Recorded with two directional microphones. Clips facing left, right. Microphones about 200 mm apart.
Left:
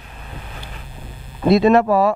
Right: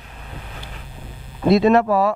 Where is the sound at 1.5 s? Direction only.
15° left (ahead or behind).